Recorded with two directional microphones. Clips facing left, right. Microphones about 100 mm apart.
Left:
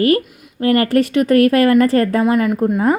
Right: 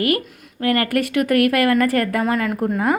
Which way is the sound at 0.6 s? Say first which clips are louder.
Left 5 dB; 30° left (ahead or behind).